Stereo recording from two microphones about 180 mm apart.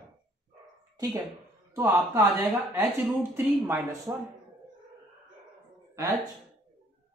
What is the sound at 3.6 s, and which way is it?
Speech, 20° right (ahead or behind).